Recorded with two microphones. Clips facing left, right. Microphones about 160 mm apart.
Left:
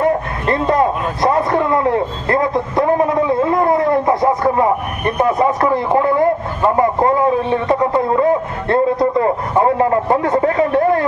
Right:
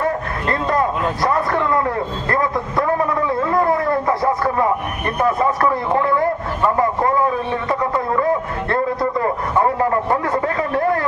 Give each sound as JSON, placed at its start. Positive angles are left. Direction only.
{"t": 0.0, "sound": "a man's voice", "side_deg": 20}